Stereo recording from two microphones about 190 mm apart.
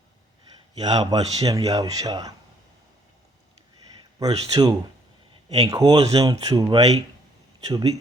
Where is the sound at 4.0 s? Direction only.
20° right (ahead or behind).